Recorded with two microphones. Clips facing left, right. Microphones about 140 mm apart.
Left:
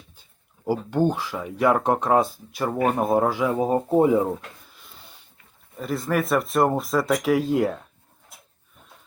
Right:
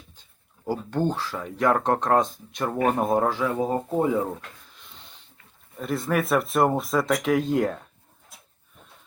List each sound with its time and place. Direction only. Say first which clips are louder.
0.2 s speech: left 2 dB; 10° left (ahead or behind)
3.6 s speech: left 7 dB; 20° left (ahead or behind)
4.4 s a sound: left 1 dB; 5° left (ahead or behind)
5.7 s speech: left 1 dB; centre (ahead or behind)